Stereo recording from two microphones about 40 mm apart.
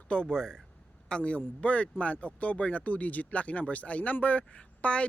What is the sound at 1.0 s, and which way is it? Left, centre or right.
A man's voice, left.